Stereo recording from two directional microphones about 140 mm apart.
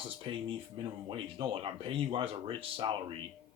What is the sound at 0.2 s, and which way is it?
Speech, 40° right (ahead or behind).